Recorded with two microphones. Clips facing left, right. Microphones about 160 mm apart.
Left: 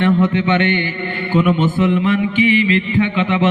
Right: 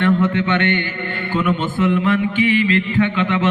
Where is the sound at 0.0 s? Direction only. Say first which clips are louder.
Left 2 dB; 15° left (ahead or behind).